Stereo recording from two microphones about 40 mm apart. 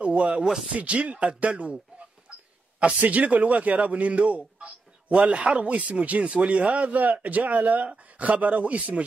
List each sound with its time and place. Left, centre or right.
0.0 s a man's voice: right
3.0 s a man's voice: right
4.6 s a sound: right
5.2 s a man's voice: right